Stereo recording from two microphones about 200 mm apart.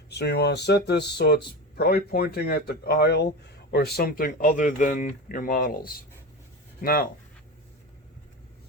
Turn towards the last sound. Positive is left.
turn(degrees=50)  # may be behind; listen again after turning